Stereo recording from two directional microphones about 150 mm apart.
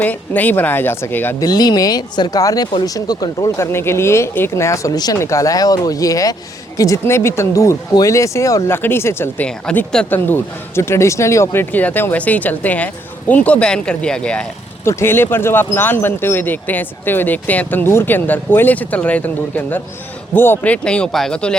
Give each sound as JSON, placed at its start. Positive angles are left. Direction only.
{"t": 0.0, "sound": "speech", "side_deg": 10}
{"t": 1.5, "sound": "speech", "side_deg": 25}
{"t": 9.5, "sound": "speech", "side_deg": 5}